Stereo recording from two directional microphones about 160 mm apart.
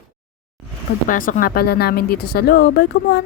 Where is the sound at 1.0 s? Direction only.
60° left (ahead or behind); by 3.2 s 85° left.